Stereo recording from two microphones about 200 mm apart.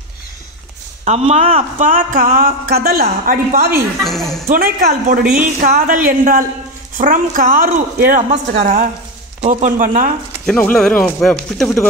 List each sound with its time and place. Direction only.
1.0 s speech: 35° right (ahead or behind)
4.0 s speech: centre (ahead or behind)
4.5 s speech: 50° right (ahead or behind)
5.2 s speech: 5° right (ahead or behind)
5.6 s a woman's voice: 40° right (ahead or behind)
10.4 s speech: 5° left (ahead or behind)